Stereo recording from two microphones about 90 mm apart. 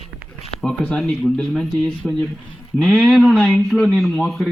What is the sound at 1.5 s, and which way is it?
Speech, 5° left (ahead or behind).